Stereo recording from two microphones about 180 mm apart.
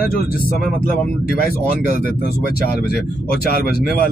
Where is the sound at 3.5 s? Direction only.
55° left (ahead or behind).